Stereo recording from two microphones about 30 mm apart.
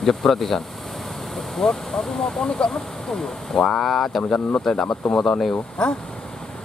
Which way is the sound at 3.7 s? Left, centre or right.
Centre.